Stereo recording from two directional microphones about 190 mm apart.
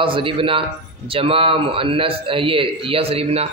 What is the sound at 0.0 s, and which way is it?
A man's voice, 25° right (ahead or behind).